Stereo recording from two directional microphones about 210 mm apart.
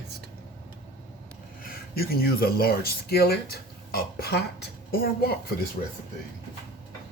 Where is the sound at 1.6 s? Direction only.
45° left (ahead or behind).